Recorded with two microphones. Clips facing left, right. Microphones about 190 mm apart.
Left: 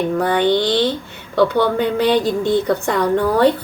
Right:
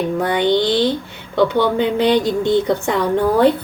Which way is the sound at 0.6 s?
10° right (ahead or behind).